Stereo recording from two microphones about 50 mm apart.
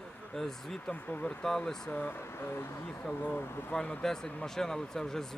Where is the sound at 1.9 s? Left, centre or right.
Left.